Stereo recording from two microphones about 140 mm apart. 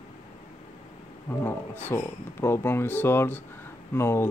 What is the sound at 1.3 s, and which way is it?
Speech, 15° left (ahead or behind).